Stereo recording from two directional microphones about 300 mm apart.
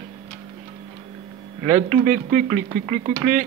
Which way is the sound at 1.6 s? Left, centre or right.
Right.